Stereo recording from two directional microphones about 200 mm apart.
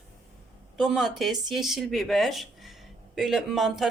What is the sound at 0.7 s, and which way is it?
Speech, centre (ahead or behind).